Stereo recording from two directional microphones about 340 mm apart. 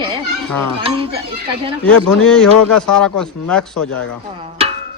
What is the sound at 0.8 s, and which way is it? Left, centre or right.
Speech, centre.